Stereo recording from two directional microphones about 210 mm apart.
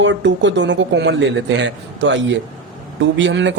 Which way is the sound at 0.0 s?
60° right (ahead or behind).